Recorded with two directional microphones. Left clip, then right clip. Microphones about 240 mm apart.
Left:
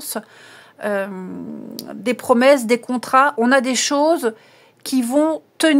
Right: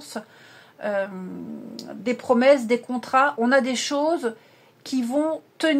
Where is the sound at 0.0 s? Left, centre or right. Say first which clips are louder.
Left 6 dB; left.